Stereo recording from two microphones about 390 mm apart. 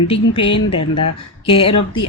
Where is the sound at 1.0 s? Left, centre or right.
Centre.